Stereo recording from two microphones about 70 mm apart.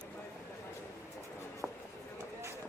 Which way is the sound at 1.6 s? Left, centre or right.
Centre.